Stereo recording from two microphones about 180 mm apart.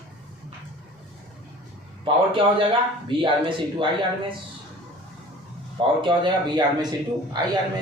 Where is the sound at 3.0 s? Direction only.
30° right (ahead or behind).